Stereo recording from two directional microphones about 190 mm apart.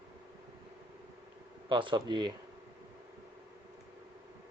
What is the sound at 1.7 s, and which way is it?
Speech, 25° right (ahead or behind).